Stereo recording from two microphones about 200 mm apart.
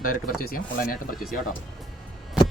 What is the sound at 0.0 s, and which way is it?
Speech, 45° left (ahead or behind).